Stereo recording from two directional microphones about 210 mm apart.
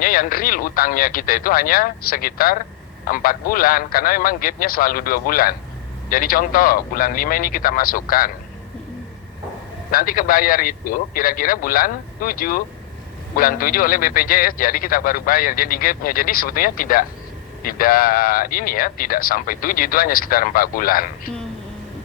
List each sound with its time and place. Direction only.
0.0 s a man's voice: 45° left (ahead or behind)
9.9 s a man's voice: 40° left (ahead or behind)